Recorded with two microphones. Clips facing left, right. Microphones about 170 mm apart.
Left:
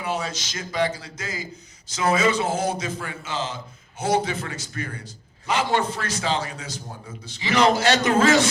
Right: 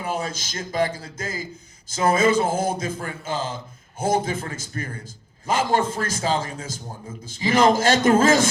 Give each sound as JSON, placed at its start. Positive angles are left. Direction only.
{"t": 0.0, "sound": "a man's voice", "side_deg": -45}